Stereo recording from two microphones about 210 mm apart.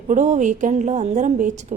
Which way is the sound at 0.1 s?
35° right (ahead or behind).